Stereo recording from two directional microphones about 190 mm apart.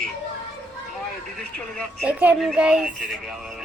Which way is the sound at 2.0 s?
5° right (ahead or behind).